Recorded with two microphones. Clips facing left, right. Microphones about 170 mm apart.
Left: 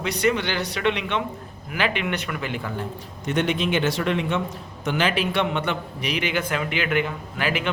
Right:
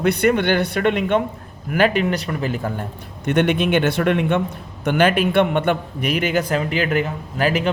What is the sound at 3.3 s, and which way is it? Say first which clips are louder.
A man's voice: right 5 dB; 60° right (ahead or behind).